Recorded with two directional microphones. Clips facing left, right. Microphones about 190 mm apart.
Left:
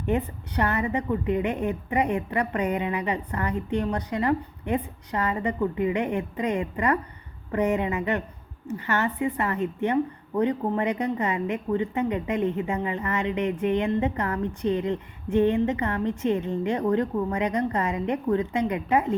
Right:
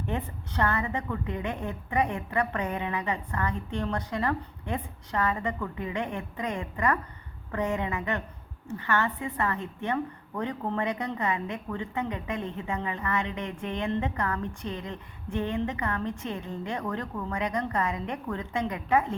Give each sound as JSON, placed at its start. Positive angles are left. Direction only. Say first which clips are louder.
{"t": 0.0, "sound": "a woman's voice", "louder": "left 7 dB", "side_deg": 15}